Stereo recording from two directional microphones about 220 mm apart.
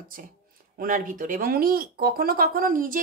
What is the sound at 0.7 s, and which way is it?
A woman's voice, 40° right (ahead or behind).